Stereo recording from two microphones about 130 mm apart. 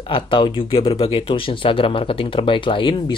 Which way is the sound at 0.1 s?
40° left (ahead or behind).